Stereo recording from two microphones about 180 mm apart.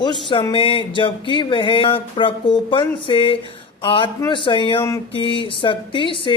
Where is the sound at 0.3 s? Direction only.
25° left (ahead or behind).